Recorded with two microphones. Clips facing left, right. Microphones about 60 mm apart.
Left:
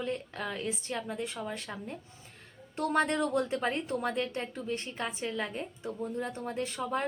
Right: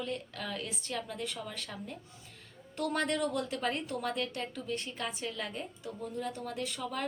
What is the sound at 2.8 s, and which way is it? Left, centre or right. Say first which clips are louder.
A woman's voice: left 3 dB; left.